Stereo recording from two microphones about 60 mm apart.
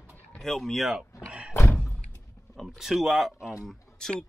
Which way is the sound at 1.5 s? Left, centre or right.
Left.